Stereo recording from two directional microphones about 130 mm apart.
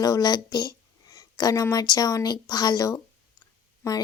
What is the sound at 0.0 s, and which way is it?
Speech, 30° left (ahead or behind).